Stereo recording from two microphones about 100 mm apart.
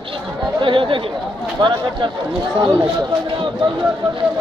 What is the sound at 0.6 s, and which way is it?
Speech, 60° right (ahead or behind).